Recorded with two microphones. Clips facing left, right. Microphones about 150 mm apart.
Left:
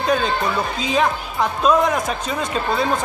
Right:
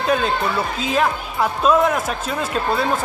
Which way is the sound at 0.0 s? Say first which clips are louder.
Even; 5° right (ahead or behind).